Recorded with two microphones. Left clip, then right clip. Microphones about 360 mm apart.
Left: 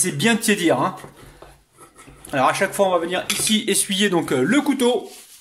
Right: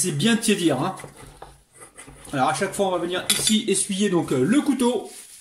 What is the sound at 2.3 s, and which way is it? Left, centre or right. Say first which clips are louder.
Speech: left 4 dB; left.